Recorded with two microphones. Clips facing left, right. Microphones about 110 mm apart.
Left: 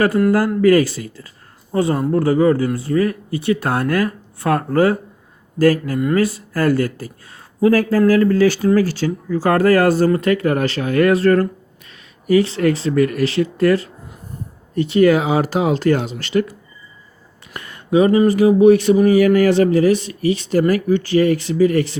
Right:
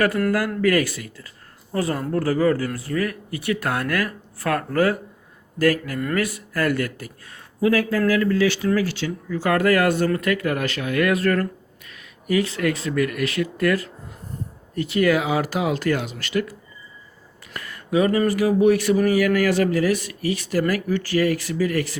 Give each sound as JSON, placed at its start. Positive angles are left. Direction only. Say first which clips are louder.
{"t": 0.3, "sound": "speech", "louder": "left 7 dB", "side_deg": 30}
{"t": 17.5, "sound": "a sound", "louder": "left 6 dB", "side_deg": 25}
{"t": 18.3, "sound": "speech", "louder": "left 7 dB", "side_deg": 25}